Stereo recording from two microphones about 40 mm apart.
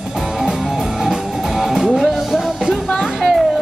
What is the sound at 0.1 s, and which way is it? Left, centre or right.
Music, centre.